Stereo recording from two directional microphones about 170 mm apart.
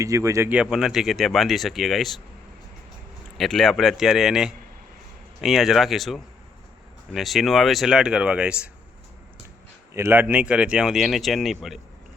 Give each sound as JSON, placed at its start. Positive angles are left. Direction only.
{"t": 0.0, "sound": "speech", "side_deg": -20}
{"t": 0.5, "sound": "speech", "side_deg": -5}
{"t": 3.3, "sound": "speech", "side_deg": 0}
{"t": 9.9, "sound": "speech", "side_deg": -15}